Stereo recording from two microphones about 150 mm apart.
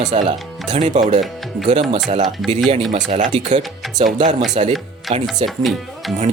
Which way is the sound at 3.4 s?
50° right (ahead or behind).